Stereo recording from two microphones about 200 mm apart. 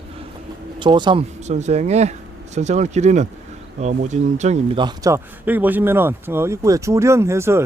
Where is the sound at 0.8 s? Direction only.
25° right (ahead or behind).